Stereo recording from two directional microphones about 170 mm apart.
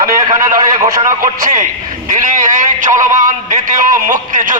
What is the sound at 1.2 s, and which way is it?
A man's voice, 50° right (ahead or behind).